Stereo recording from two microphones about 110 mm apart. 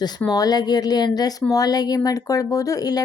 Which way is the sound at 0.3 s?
35° left (ahead or behind).